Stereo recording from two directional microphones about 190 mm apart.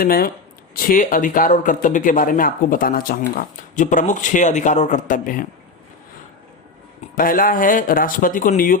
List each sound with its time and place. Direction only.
0.0 s speech: 50° left (ahead or behind)
7.2 s speech: 45° left (ahead or behind)